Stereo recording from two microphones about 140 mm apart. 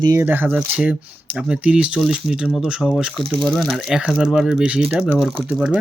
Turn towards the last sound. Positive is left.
turn(degrees=-10)  # may be behind; listen again after turning